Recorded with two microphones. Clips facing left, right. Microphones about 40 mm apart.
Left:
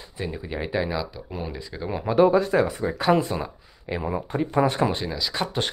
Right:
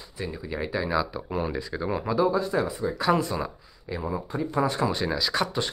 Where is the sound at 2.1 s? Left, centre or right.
Left.